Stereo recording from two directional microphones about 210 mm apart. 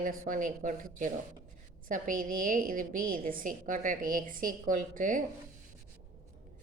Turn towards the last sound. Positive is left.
turn(degrees=-40)  # may be behind; listen again after turning